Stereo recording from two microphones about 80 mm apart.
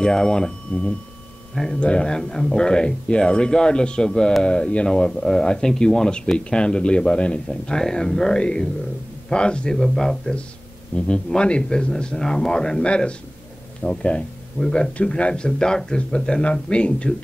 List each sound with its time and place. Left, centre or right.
0.0 s speech: centre